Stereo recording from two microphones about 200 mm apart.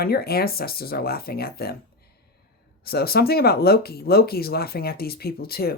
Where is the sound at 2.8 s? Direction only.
50° left (ahead or behind).